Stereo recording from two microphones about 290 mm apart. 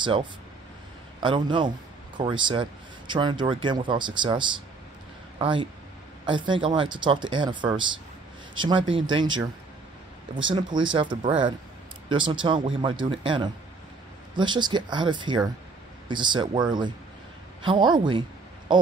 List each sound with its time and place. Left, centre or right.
0.0 s speech: centre
10.5 s speech: centre
18.7 s a sound: centre